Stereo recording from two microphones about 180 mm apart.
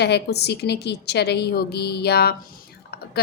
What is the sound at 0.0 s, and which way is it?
A woman's voice, 65° left (ahead or behind).